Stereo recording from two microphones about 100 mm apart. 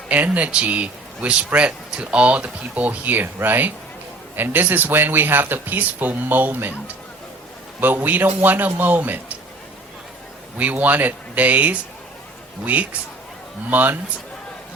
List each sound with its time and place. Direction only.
0.1 s speech: 15° right (ahead or behind)
10.6 s speech: 15° right (ahead or behind)